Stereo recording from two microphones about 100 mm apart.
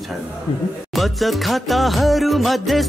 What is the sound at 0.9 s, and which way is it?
Music, centre (ahead or behind).